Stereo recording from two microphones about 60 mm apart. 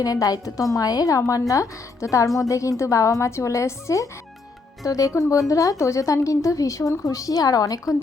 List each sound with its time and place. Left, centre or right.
0.0 s a woman's voice: left
4.9 s a woman's voice: left